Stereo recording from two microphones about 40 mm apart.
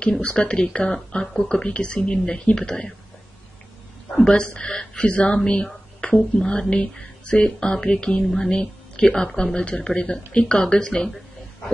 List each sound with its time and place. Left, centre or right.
0.2 s speech: left
4.2 s speech: centre
8.2 s speech: centre
8.5 s speech: left